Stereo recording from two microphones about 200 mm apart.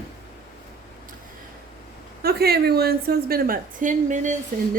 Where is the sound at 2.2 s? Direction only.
50° right (ahead or behind).